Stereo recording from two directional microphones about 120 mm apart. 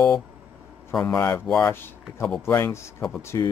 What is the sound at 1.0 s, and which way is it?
Speech, 20° left (ahead or behind).